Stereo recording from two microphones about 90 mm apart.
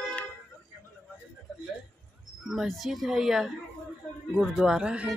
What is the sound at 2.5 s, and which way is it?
Speech, centre (ahead or behind).